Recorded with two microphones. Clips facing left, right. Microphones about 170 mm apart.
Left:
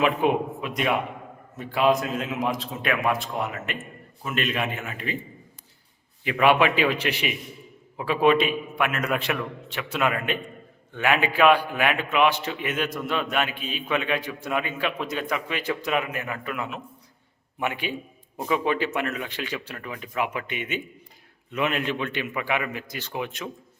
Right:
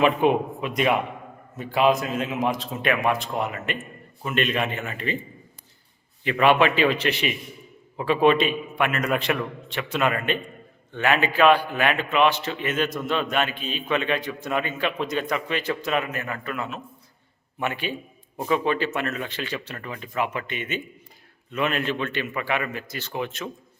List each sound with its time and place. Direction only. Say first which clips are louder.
0.0 s a man's voice: right 2 dB; centre (ahead or behind)
6.4 s a man's voice: right 1 dB; 10° left (ahead or behind)